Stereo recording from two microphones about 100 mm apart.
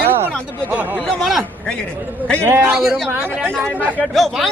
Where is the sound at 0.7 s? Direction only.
15° right (ahead or behind).